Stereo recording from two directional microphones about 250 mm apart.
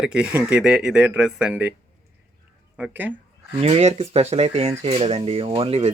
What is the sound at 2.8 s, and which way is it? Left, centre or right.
Speech, centre.